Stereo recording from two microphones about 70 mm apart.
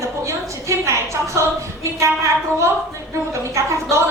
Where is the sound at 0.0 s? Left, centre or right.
Right.